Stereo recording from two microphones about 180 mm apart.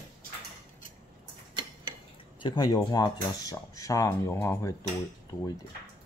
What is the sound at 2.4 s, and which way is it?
Speech, 25° left (ahead or behind).